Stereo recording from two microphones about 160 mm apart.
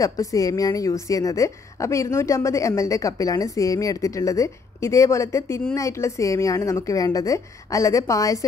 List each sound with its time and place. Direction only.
0.0 s a woman's voice: 20° left (ahead or behind)